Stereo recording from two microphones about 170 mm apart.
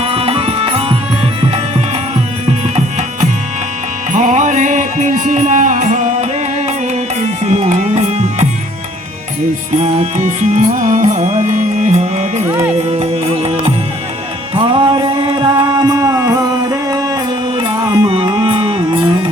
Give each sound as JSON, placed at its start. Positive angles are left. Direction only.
{"t": 0.0, "sound": "music", "side_deg": -35}
{"t": 2.5, "sound": "music", "side_deg": -40}
{"t": 9.8, "sound": "music", "side_deg": -40}
{"t": 12.5, "sound": "speech", "side_deg": -15}
{"t": 12.9, "sound": "music", "side_deg": -40}